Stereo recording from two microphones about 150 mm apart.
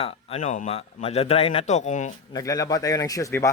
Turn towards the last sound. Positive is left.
turn(degrees=20)  # may be behind; listen again after turning